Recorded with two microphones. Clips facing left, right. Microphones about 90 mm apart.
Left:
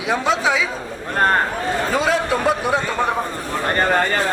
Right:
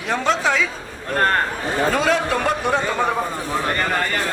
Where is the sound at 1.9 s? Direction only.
Centre (ahead or behind).